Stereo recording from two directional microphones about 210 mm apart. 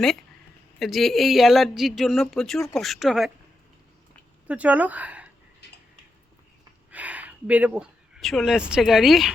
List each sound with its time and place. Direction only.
0.8 s speech: centre (ahead or behind)
4.4 s speech: 5° right (ahead or behind)
5.6 s a sound: 55° left (ahead or behind)
6.9 s speech: 5° right (ahead or behind)